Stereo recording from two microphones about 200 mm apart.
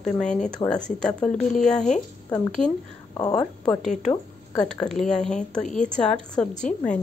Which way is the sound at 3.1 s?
20° left (ahead or behind).